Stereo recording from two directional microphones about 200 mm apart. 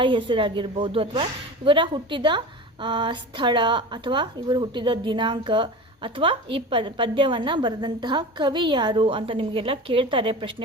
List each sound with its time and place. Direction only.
0.0 s a woman's voice: 25° right (ahead or behind)